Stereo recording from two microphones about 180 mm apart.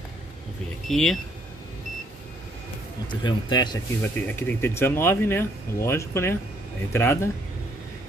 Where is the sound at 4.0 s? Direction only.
10° left (ahead or behind).